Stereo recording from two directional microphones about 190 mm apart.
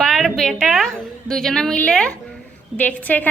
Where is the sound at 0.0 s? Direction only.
Centre (ahead or behind).